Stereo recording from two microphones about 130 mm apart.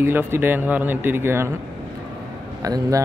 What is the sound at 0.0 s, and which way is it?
Speech, 15° right (ahead or behind).